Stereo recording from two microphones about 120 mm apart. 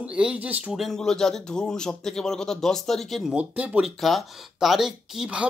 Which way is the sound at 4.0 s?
Centre (ahead or behind).